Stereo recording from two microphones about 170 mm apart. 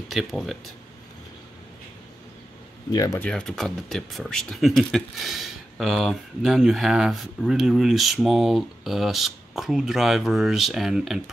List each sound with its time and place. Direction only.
0.1 s speech: centre (ahead or behind)
2.9 s speech: 20° left (ahead or behind)
3.2 s speech: 5° left (ahead or behind)